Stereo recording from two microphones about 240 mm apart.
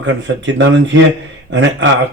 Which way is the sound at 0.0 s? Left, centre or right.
Right.